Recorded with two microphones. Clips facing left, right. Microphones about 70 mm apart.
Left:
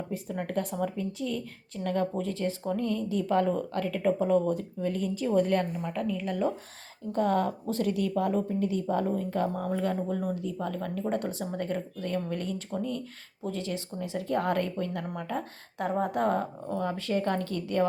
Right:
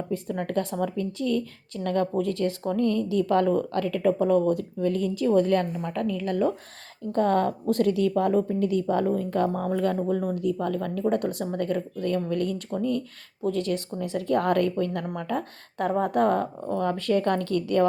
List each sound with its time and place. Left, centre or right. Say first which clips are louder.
0.1 s a woman's voice: right 5 dB; right
5.5 s a woman's voice: right 3 dB; centre
7.1 s a woman's voice: right 4 dB; right
9.3 s speech: right 4 dB; right
10.1 s speech: right 5 dB; right
10.3 s a woman's voice: right 7 dB; right